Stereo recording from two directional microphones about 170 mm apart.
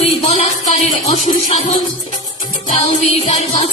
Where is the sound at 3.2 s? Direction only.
40° left (ahead or behind).